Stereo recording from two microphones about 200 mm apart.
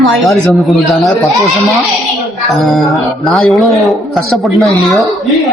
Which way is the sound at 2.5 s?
Centre (ahead or behind).